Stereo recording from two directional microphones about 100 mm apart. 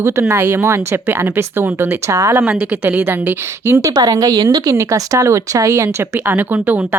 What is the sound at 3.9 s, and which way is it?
A woman's voice, 40° right (ahead or behind).